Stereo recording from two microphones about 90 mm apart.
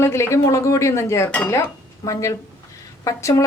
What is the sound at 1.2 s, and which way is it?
Speech, 15° left (ahead or behind).